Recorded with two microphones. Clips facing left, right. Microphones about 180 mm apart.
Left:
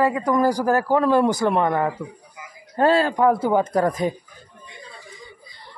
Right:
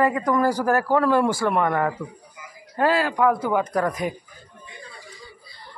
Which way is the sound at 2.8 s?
25° left (ahead or behind).